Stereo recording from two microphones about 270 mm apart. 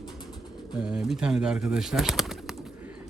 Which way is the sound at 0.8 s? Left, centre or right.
Centre.